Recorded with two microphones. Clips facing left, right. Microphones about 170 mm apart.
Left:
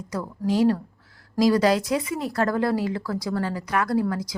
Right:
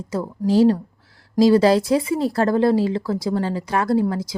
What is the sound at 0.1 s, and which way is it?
A woman's voice, 30° right (ahead or behind).